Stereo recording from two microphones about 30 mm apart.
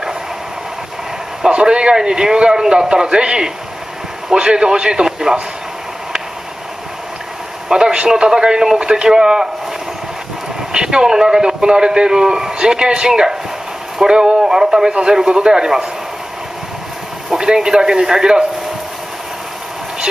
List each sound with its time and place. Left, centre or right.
1.5 s a man's voice: right
7.7 s a man's voice: right
10.7 s a man's voice: right
14.9 s a man's voice: right
17.4 s a man's voice: right